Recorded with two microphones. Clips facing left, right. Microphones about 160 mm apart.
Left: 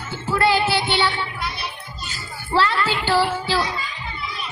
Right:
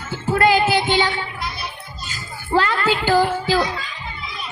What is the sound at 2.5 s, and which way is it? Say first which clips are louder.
Music: right 2 dB; 45° right (ahead or behind).